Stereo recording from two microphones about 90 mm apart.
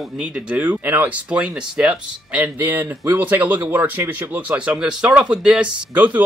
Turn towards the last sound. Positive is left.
turn(degrees=-15)  # may be behind; listen again after turning